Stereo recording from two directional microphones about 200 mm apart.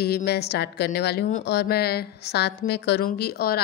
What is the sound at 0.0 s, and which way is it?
A woman's voice, 50° left (ahead or behind).